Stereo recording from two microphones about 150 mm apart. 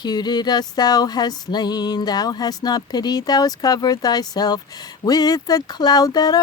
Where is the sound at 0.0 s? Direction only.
30° left (ahead or behind).